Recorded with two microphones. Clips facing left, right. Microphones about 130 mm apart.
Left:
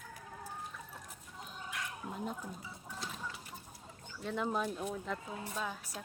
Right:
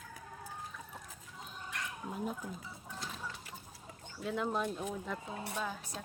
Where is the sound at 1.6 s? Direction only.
5° right (ahead or behind).